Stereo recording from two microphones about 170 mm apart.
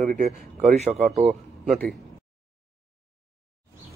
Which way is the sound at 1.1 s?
Centre (ahead or behind).